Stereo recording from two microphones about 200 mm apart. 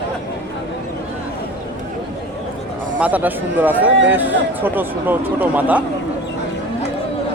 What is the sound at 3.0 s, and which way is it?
A man's voice, 10° right (ahead or behind).